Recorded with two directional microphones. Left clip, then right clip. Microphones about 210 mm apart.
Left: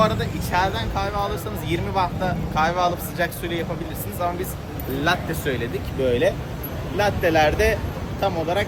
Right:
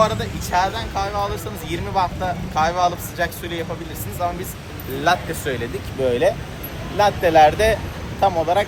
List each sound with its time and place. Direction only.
0.0 s speech: 10° left (ahead or behind)